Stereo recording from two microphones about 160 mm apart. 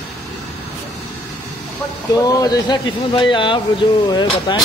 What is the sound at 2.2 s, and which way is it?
Speech, 20° left (ahead or behind).